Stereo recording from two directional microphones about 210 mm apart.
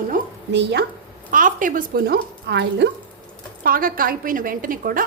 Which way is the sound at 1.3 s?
40° right (ahead or behind).